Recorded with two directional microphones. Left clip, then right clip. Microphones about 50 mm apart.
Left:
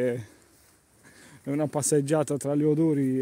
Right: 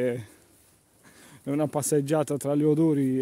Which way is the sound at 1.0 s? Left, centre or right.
Right.